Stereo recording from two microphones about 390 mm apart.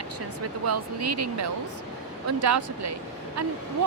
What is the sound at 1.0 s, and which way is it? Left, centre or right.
Speech, right.